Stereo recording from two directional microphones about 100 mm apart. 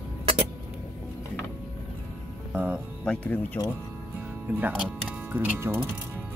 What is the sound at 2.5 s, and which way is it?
Speech, 15° right (ahead or behind).